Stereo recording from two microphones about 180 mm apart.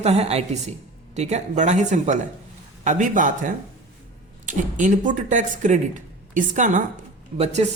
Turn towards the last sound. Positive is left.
turn(degrees=-35)  # may be behind; listen again after turning